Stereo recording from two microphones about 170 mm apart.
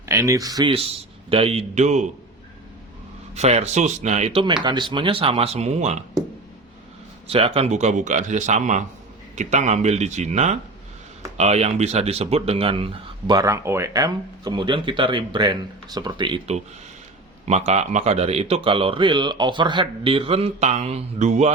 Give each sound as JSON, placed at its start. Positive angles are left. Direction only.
{"t": 0.0, "sound": "a man's voice", "side_deg": -15}
{"t": 3.3, "sound": "a man's voice", "side_deg": -40}
{"t": 7.3, "sound": "a man's voice", "side_deg": -35}
{"t": 13.3, "sound": "a man's voice", "side_deg": -20}